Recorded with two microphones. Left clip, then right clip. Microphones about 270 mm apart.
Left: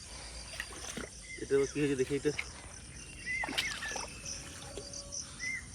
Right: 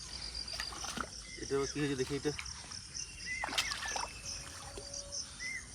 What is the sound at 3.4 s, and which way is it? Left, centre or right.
Rowboat, left.